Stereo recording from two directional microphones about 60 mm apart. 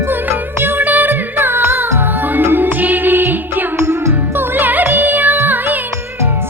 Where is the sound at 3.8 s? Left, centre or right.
Right.